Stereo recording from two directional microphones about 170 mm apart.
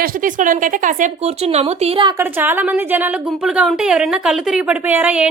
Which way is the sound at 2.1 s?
10° right (ahead or behind).